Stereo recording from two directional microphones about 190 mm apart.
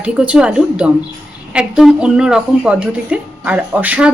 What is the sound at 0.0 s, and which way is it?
A woman's voice, 5° right (ahead or behind).